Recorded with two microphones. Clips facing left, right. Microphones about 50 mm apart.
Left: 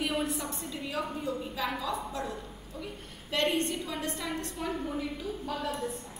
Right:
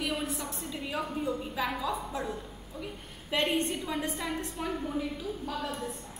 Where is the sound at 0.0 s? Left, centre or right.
Centre.